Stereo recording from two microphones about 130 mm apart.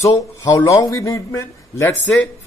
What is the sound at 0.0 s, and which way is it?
A man's voice, 25° left (ahead or behind).